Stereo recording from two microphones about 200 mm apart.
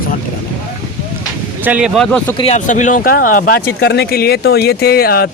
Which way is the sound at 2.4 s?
35° left (ahead or behind).